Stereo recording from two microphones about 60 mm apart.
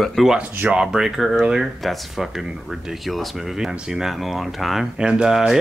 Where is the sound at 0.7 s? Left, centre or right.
Centre.